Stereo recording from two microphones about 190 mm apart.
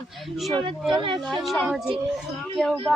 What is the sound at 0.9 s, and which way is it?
Speech, 25° right (ahead or behind).